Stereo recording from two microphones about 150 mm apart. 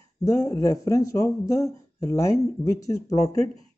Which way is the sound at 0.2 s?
20° left (ahead or behind).